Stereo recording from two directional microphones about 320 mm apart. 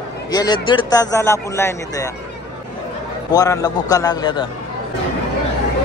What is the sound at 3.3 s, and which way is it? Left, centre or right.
A man's voice, centre.